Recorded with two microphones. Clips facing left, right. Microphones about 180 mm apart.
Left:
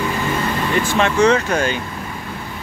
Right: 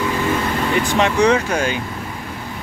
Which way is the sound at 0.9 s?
15° right (ahead or behind).